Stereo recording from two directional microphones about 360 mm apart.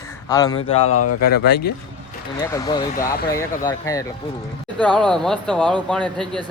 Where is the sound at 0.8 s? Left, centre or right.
Left.